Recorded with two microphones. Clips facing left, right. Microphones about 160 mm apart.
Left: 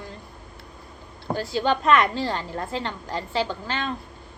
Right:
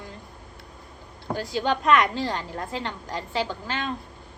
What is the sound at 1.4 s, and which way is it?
A woman's voice, 15° right (ahead or behind).